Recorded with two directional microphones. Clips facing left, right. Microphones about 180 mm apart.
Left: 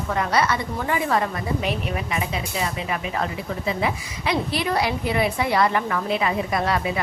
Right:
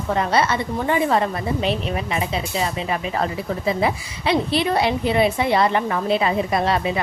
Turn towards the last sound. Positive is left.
turn(degrees=-25)  # may be behind; listen again after turning